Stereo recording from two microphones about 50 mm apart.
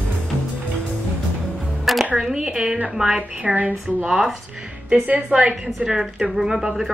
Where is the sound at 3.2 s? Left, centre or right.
Right.